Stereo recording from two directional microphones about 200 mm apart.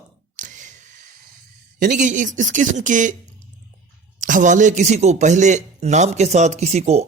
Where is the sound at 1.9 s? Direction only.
40° right (ahead or behind).